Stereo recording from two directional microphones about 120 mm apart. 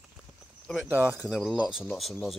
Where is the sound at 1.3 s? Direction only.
Centre (ahead or behind).